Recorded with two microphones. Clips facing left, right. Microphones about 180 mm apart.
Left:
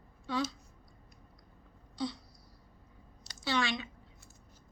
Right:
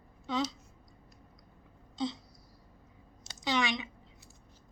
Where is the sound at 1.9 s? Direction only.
20° right (ahead or behind).